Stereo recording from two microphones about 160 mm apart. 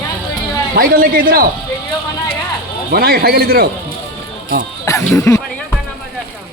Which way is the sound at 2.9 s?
70° right (ahead or behind).